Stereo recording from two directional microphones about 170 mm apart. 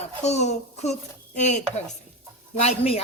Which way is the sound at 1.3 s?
45° left (ahead or behind).